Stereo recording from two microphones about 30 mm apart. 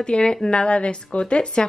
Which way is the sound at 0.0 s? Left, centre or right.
Left.